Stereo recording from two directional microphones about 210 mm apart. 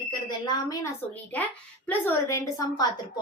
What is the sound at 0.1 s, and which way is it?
A woman's voice, 20° left (ahead or behind).